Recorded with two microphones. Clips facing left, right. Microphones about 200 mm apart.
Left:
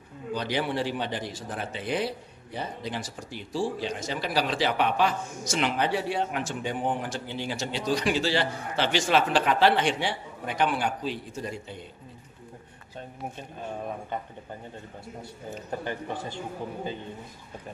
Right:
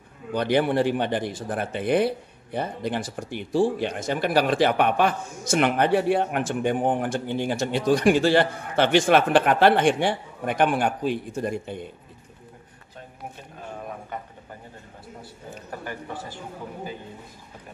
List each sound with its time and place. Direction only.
0.3 s speech: 55° right (ahead or behind)
15.8 s a man's voice: 25° left (ahead or behind)